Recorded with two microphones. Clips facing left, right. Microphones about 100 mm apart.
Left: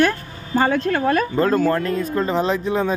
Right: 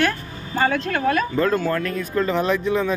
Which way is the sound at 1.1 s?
40° left (ahead or behind).